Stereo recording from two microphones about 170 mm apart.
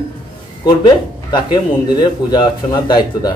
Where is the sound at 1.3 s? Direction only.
25° left (ahead or behind).